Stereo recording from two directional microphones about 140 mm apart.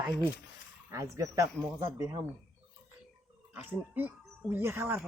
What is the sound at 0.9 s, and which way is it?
Speech, 20° right (ahead or behind).